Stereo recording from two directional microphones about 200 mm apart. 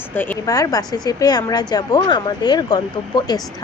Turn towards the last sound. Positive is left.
turn(degrees=20)  # may be behind; listen again after turning